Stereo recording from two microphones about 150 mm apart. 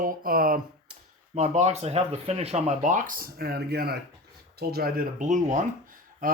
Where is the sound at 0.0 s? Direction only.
70° right (ahead or behind).